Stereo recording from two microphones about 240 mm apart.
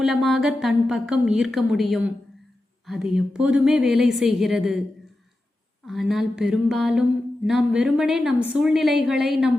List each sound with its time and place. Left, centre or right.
0.0 s a woman's voice: centre
5.8 s a woman's voice: centre